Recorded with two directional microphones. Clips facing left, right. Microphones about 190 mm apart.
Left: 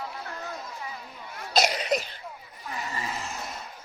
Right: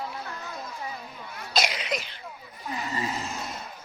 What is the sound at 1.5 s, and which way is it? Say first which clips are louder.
Cough: left 4 dB; 40° left (ahead or behind).